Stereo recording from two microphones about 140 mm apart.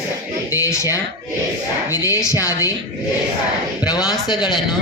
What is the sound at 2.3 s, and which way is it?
Speech, 20° left (ahead or behind).